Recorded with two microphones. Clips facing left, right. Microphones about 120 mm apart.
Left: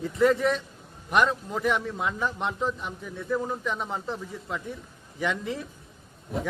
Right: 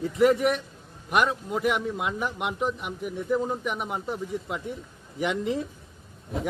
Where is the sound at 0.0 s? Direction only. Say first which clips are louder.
Right 1 dB; 15° right (ahead or behind).